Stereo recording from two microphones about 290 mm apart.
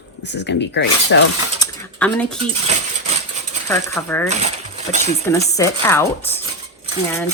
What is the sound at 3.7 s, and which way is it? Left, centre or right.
Speech, centre.